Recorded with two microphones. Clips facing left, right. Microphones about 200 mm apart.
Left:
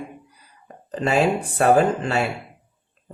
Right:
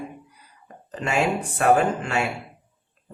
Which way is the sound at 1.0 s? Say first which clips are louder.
Left 4 dB; 35° left (ahead or behind).